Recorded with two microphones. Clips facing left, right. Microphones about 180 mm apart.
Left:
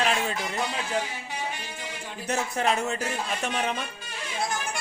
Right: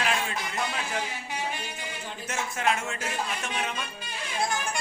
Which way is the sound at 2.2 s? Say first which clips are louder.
Left 3 dB; 35° left (ahead or behind).